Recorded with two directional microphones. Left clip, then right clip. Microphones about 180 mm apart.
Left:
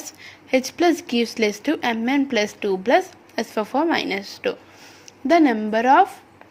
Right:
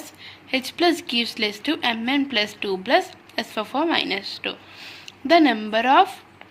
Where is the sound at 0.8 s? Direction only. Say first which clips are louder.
Right 3 dB; 25° left (ahead or behind).